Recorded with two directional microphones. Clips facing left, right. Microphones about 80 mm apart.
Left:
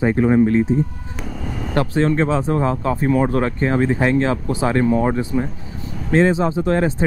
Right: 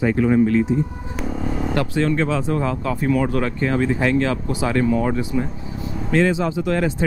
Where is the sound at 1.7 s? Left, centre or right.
Left.